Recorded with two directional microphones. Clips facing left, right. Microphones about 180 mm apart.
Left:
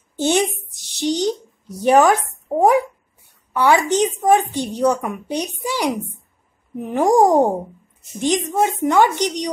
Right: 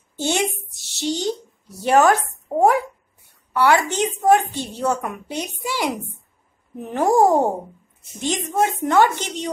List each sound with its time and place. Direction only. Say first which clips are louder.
0.2 s a woman's voice: left 4 dB; 15° left (ahead or behind)
3.5 s a woman's voice: left 2 dB; 15° left (ahead or behind)